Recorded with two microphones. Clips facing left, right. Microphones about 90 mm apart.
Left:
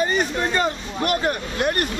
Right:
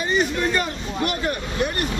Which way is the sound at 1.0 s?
50° left (ahead or behind).